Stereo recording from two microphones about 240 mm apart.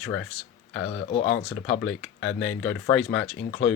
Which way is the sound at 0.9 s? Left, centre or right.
Left.